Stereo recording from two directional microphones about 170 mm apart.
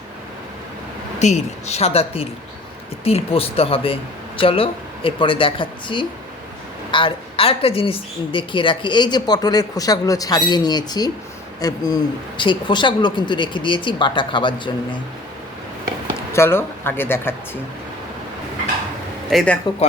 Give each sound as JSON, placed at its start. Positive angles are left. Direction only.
{"t": 1.2, "sound": "a woman's voice", "side_deg": 40}
{"t": 16.3, "sound": "speech", "side_deg": 15}
{"t": 19.3, "sound": "speech", "side_deg": 0}